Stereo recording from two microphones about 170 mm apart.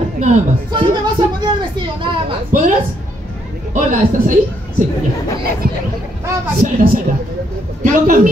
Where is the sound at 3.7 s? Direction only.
50° right (ahead or behind).